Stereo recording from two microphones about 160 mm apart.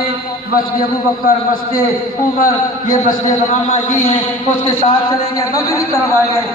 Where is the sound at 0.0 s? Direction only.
65° left (ahead or behind).